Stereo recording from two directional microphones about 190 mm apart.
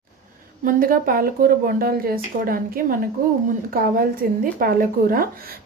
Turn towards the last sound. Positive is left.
turn(degrees=-50)  # may be behind; listen again after turning